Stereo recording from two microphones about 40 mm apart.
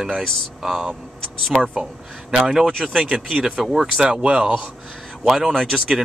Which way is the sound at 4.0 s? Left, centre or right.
Right.